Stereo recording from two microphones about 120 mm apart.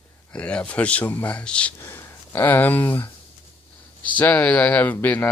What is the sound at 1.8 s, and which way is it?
Speech, 20° left (ahead or behind).